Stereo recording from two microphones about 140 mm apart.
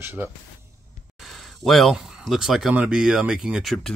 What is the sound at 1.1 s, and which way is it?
Speech, centre (ahead or behind).